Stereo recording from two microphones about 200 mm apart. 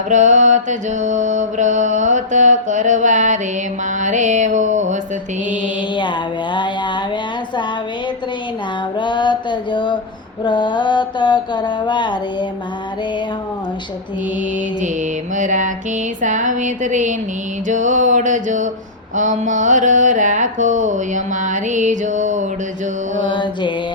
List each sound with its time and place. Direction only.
0.1 s music: 40° right (ahead or behind)
5.5 s mantra: 25° left (ahead or behind)
9.0 s mantra: 25° left (ahead or behind)
15.4 s music: 40° right (ahead or behind)
23.2 s mantra: 25° left (ahead or behind)